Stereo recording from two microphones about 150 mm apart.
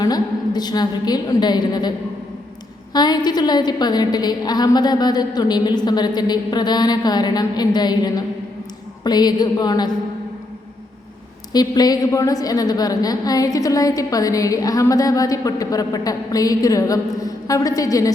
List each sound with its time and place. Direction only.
0.0 s a woman's voice: 25° left (ahead or behind)
2.9 s a woman's voice: 30° left (ahead or behind)
11.5 s a woman's voice: 25° left (ahead or behind)